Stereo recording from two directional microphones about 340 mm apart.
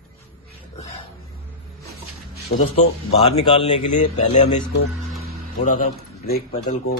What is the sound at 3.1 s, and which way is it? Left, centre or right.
Speech, centre.